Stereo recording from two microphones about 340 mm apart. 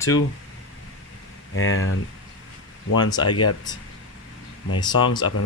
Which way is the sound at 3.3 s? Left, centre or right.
Left.